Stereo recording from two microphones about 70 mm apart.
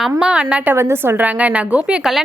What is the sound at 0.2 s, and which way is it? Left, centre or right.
Speech, centre.